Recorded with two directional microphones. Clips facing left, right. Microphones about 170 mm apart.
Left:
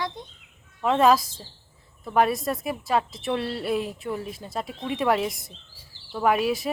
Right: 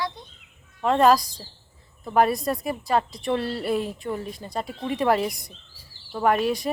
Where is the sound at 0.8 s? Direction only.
Centre (ahead or behind).